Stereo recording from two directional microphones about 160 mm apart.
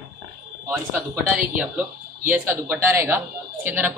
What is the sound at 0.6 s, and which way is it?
A woman's voice, 10° right (ahead or behind).